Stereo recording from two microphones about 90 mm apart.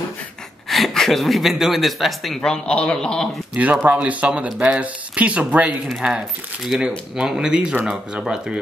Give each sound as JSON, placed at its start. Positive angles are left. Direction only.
{"t": 0.7, "sound": "speech", "side_deg": 0}
{"t": 3.5, "sound": "speech", "side_deg": -15}